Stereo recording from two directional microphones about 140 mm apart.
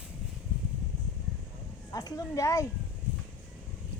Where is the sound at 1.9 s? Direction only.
25° left (ahead or behind).